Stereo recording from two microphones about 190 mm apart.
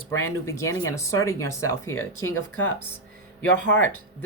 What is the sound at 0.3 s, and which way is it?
Speech, 15° left (ahead or behind).